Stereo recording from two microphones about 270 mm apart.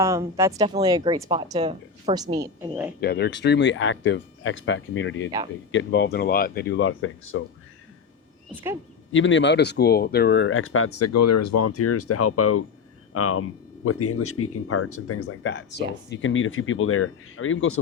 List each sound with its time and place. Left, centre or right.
0.0 s a woman's voice: centre
3.0 s speech: left
9.1 s speech: left